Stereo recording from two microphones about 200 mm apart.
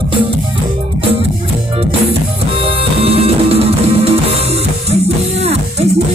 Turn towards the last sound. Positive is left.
turn(degrees=-30)  # may be behind; listen again after turning